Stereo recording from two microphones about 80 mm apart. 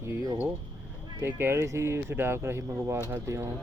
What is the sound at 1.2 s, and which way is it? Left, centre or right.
Speech, right.